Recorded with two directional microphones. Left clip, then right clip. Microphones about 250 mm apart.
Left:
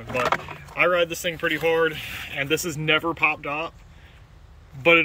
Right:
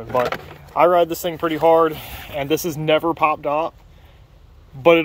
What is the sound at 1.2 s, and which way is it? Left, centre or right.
Speech, centre.